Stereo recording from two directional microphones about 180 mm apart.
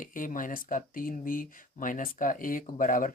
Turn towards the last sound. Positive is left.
turn(degrees=50)  # may be behind; listen again after turning